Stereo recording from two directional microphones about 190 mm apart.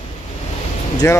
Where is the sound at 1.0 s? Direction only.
15° left (ahead or behind).